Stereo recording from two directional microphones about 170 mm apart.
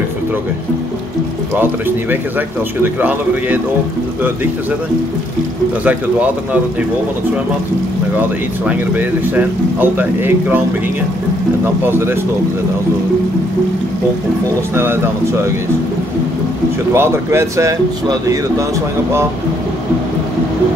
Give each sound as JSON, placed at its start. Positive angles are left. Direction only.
{"t": 2.8, "sound": "speech", "side_deg": -10}
{"t": 5.9, "sound": "speech", "side_deg": -10}
{"t": 8.2, "sound": "speech", "side_deg": -10}
{"t": 11.6, "sound": "speech", "side_deg": -15}
{"t": 14.7, "sound": "speech", "side_deg": -15}
{"t": 16.9, "sound": "speech", "side_deg": -15}